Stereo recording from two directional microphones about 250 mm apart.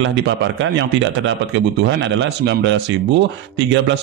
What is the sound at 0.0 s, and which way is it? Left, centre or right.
Speech, right.